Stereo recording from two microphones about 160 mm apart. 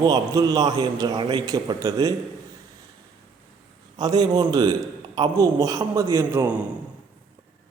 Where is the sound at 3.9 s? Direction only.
25° right (ahead or behind).